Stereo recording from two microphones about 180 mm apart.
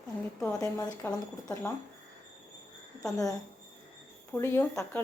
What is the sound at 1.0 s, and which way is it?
Speech, 10° left (ahead or behind).